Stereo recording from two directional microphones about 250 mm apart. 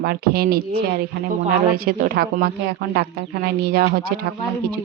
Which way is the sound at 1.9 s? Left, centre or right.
Right.